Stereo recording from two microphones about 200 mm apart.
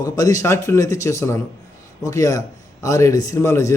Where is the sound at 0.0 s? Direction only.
15° left (ahead or behind).